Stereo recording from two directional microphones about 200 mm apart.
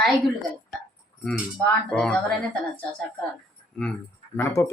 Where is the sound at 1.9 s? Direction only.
5° left (ahead or behind).